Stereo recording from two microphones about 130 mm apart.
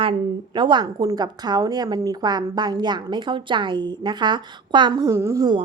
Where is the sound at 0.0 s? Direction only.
40° right (ahead or behind).